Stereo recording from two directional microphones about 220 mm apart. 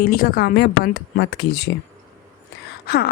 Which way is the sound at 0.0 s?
40° left (ahead or behind).